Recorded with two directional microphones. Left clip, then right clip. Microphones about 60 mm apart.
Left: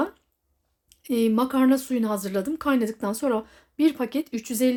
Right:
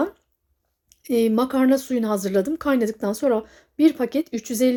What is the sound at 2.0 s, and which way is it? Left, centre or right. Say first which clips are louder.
A woman's voice: right 5 dB; right.